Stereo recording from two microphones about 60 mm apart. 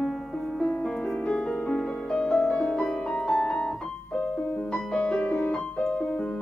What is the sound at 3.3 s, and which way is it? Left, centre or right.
Piano, centre.